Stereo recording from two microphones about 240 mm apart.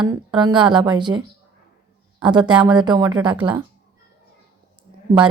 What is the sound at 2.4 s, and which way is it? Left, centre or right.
Speech, centre.